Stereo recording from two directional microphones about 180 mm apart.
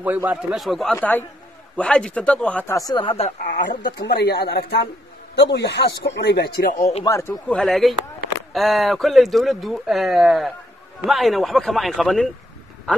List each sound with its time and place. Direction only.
0.0 s speech: 10° right (ahead or behind)
0.9 s speech: 10° left (ahead or behind); by 4.0 s 50° left (ahead or behind)
4.0 s speech: 65° left (ahead or behind)
7.1 s speech: 15° left (ahead or behind)